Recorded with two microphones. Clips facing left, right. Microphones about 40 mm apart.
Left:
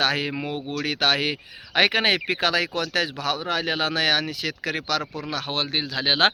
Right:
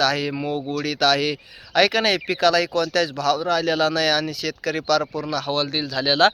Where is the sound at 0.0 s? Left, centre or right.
Left.